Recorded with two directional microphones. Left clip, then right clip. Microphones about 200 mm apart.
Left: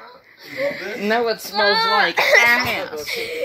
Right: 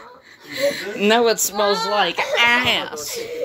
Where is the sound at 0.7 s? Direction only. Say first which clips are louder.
Right 5 dB; 55° right (ahead or behind).